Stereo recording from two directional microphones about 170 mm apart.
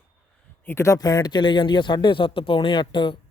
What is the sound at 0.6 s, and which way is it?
Speech, 15° left (ahead or behind).